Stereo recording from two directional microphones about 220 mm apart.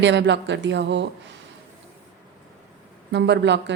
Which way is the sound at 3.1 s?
50° right (ahead or behind).